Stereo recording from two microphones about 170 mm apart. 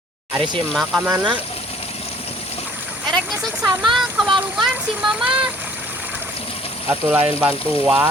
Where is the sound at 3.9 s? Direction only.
Centre (ahead or behind).